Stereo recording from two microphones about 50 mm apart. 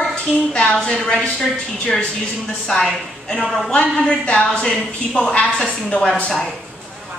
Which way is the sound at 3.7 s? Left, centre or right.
Left.